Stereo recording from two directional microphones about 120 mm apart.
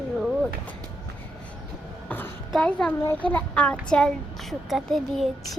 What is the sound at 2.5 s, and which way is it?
A child's voice, 10° left (ahead or behind).